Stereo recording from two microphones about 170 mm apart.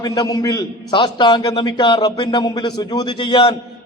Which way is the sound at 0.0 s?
20° left (ahead or behind).